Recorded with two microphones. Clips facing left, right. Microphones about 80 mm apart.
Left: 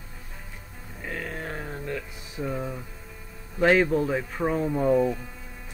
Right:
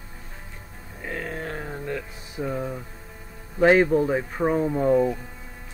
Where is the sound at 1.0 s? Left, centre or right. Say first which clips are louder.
Right 2 dB; centre.